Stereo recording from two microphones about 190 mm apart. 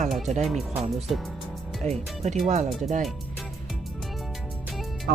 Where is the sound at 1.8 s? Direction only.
35° right (ahead or behind).